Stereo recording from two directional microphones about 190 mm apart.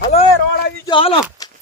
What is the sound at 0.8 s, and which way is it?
Speech, 25° left (ahead or behind).